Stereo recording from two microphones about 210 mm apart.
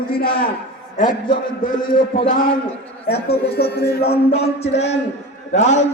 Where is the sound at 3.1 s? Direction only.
50° left (ahead or behind).